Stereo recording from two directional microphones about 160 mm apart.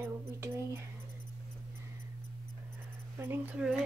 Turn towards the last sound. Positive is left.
turn(degrees=-10)  # may be behind; listen again after turning